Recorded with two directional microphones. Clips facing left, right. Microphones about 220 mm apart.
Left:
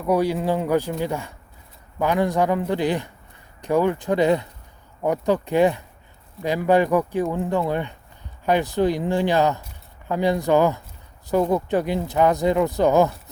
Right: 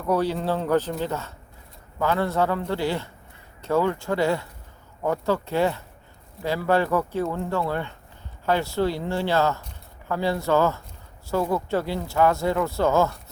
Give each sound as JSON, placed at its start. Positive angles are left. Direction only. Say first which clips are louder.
{"t": 0.0, "sound": "speech", "louder": "left 3 dB", "side_deg": 10}